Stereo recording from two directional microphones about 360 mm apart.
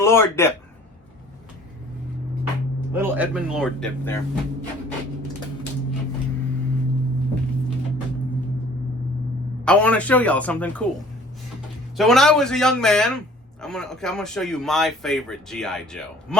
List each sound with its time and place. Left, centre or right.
0.0 s speech: centre
2.9 s speech: centre
9.6 s speech: centre
11.9 s speech: centre